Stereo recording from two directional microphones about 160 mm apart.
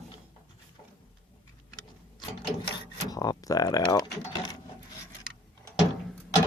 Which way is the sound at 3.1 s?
25° left (ahead or behind).